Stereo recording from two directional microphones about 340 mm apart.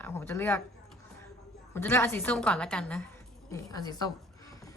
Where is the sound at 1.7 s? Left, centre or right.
Centre.